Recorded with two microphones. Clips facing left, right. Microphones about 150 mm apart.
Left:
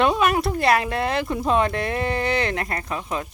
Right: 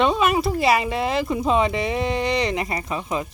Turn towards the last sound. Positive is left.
turn(degrees=0)  # may be behind; listen again after turning